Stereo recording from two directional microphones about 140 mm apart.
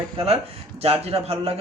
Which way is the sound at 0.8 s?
45° right (ahead or behind).